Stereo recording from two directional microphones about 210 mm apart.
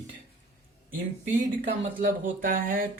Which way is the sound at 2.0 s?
40° right (ahead or behind).